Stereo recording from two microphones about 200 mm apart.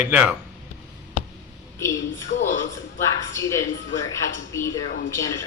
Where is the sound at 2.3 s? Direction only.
40° left (ahead or behind).